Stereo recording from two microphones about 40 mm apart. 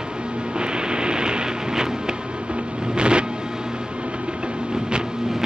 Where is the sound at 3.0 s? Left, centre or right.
Right.